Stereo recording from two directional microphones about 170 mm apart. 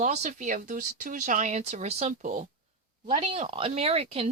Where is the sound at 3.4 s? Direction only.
30° right (ahead or behind).